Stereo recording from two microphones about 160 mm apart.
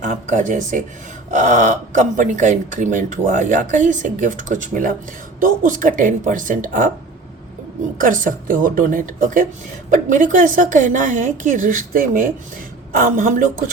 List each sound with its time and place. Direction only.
0.0 s a woman's voice: 50° right (ahead or behind)
7.9 s a woman's voice: 55° right (ahead or behind)